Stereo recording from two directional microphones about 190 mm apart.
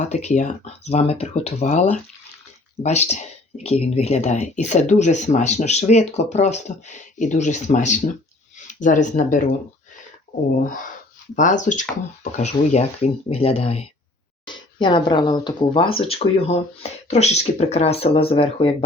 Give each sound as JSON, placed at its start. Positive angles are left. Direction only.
{"t": 0.1, "sound": "speech", "side_deg": 40}
{"t": 11.3, "sound": "speech", "side_deg": 40}